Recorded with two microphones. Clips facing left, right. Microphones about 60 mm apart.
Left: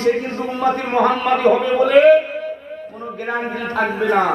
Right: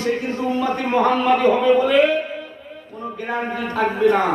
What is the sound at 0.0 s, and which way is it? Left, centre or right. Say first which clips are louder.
A man's voice: left 3 dB; left.